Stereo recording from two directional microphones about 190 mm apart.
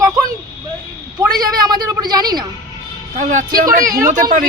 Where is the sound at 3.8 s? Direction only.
20° right (ahead or behind).